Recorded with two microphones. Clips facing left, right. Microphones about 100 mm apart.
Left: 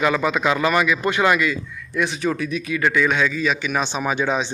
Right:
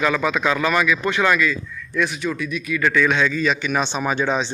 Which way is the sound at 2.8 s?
15° left (ahead or behind).